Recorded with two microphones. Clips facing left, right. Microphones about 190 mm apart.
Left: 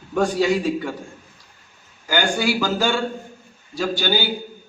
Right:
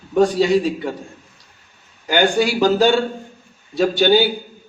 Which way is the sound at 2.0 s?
25° right (ahead or behind).